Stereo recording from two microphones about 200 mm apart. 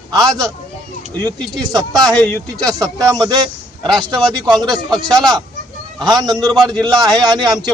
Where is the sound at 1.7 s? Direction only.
20° right (ahead or behind).